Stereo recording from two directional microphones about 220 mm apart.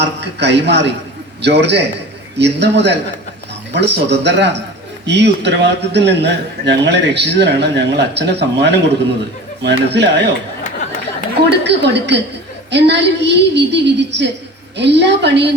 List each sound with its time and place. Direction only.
0.0 s a man's voice: 50° right (ahead or behind)
11.3 s a man's voice: 50° right (ahead or behind)